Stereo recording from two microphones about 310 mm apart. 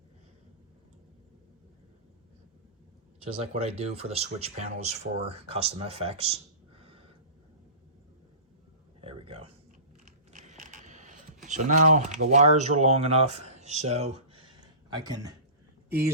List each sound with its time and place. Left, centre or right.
3.2 s speech: centre
9.0 s a sound: centre
10.1 s scissors: right
15.9 s speech: centre